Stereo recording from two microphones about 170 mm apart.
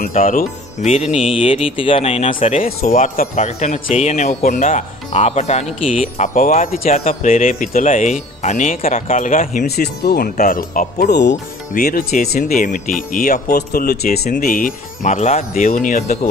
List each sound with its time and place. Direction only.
0.0 s speech: 50° left (ahead or behind)
0.9 s speech: 35° left (ahead or behind)
4.4 s speech: 50° left (ahead or behind)
6.2 s speech: 55° left (ahead or behind)
11.1 s speech: 85° left
11.7 s speech: 60° left (ahead or behind)